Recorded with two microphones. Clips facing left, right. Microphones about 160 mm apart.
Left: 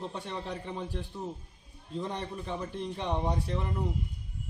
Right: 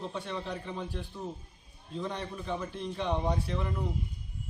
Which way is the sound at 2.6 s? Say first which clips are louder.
Even; 15° left (ahead or behind).